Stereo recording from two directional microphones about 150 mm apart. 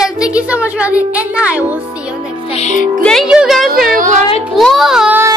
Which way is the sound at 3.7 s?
70° right (ahead or behind).